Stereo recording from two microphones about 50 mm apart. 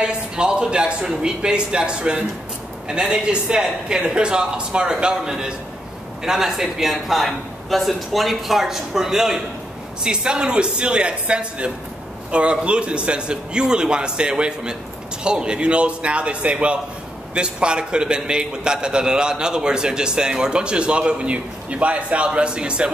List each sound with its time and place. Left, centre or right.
0.0 s a man's voice: centre